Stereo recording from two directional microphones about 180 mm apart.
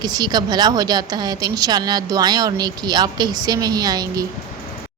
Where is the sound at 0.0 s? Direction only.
25° right (ahead or behind).